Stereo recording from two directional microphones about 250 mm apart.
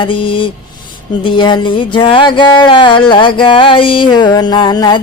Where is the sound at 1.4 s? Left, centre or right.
Centre.